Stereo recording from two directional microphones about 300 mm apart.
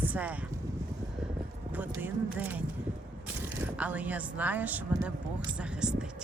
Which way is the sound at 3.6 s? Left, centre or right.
Centre.